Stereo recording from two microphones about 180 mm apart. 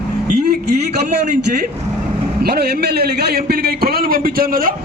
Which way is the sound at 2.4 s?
60° right (ahead or behind).